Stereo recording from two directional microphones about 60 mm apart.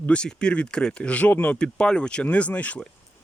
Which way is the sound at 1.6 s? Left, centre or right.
Centre.